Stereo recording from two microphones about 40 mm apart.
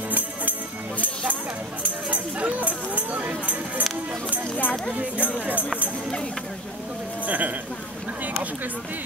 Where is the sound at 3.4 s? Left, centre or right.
Right.